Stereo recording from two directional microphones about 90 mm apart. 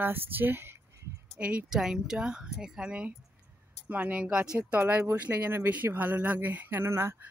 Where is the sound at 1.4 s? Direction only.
15° right (ahead or behind).